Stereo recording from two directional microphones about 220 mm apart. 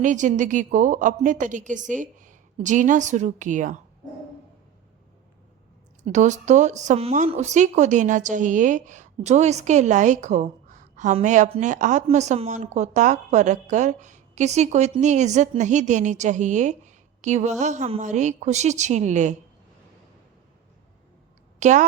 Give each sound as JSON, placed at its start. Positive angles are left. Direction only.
{"t": 0.0, "sound": "speech", "side_deg": -35}
{"t": 6.0, "sound": "speech", "side_deg": -35}
{"t": 21.6, "sound": "a woman's voice", "side_deg": -35}